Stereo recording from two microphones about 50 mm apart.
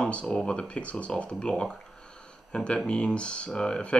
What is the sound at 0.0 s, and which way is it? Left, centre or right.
Speech, centre.